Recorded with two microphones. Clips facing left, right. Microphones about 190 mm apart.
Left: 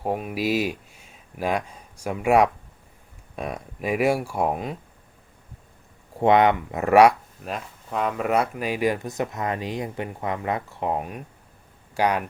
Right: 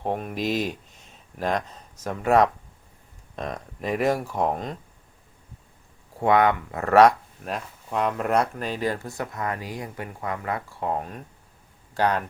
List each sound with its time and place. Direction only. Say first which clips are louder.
0.0 s speech: left 1 dB; 5° left (ahead or behind)
6.1 s speech: left 2 dB; 20° left (ahead or behind)
7.4 s speech: even; centre (ahead or behind)